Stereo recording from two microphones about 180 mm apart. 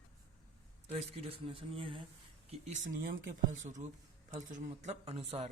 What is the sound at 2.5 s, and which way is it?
Speech, 45° right (ahead or behind).